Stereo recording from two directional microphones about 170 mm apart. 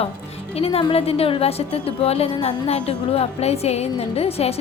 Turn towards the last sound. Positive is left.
turn(degrees=35)  # may be behind; listen again after turning